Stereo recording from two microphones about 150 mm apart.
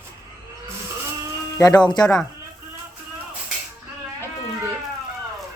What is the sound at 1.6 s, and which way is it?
Speech, 25° left (ahead or behind).